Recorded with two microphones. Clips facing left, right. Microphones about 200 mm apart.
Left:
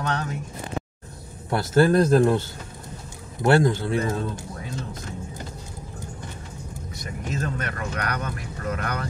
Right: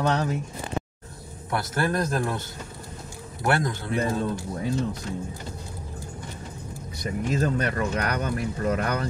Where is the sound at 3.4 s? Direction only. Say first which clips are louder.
Left 6 dB; 30° left (ahead or behind).